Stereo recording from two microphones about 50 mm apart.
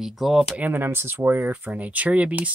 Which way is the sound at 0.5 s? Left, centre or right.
Right.